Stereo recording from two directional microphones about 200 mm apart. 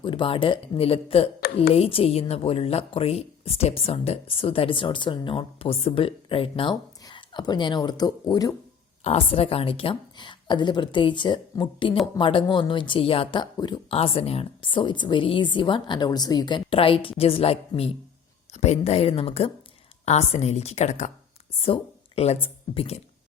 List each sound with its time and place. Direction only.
0.0 s speech: 25° left (ahead or behind)
9.0 s a woman's voice: 30° left (ahead or behind)